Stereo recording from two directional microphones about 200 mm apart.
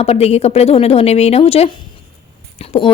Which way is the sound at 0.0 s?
30° left (ahead or behind).